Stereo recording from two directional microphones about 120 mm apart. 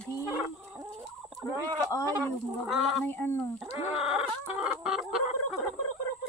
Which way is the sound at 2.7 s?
Centre (ahead or behind).